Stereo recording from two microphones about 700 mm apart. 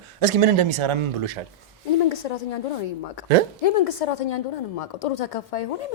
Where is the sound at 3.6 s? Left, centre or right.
Left.